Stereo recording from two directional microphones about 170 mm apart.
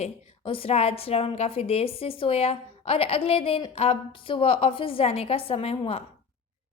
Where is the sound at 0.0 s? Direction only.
35° left (ahead or behind).